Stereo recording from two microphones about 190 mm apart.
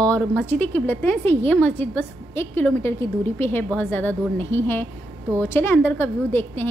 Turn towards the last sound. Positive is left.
turn(degrees=10)  # may be behind; listen again after turning